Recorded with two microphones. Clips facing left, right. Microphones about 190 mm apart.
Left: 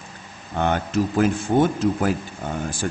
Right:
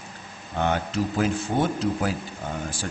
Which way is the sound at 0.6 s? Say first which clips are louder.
Left 3 dB; 55° left (ahead or behind).